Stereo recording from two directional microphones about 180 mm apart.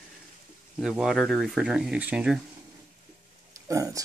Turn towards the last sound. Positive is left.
turn(degrees=-20)  # may be behind; listen again after turning